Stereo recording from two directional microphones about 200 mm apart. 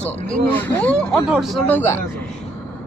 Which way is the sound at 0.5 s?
10° left (ahead or behind).